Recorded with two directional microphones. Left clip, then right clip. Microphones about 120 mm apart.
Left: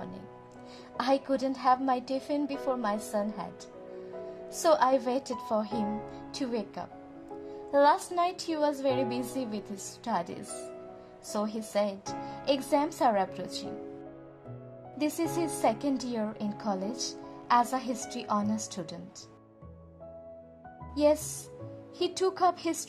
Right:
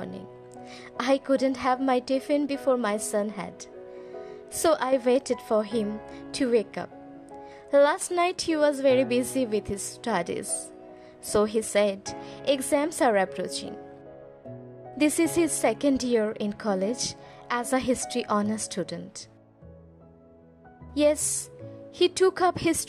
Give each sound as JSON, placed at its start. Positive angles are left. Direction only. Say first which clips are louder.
{"t": 0.9, "sound": "a woman's voice", "louder": "right 4 dB", "side_deg": -35}
{"t": 15.0, "sound": "a woman's voice", "louder": "right 7 dB", "side_deg": -40}
{"t": 20.9, "sound": "a woman's voice", "louder": "right 3 dB", "side_deg": -40}